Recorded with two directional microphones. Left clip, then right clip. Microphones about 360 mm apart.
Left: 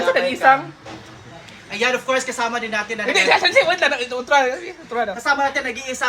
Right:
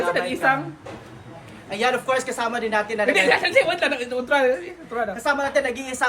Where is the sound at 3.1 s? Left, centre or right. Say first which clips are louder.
Left 4 dB; centre.